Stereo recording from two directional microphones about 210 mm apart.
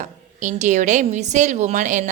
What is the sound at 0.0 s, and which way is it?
A woman's voice, 35° right (ahead or behind).